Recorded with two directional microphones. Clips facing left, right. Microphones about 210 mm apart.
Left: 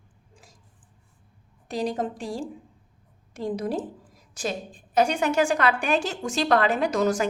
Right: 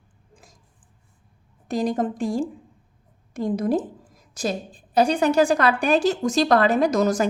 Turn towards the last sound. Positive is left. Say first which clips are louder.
# right 4 dB
turn(degrees=-40)  # may be behind; listen again after turning